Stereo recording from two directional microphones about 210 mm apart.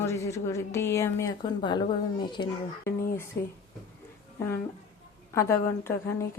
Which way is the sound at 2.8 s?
45° left (ahead or behind).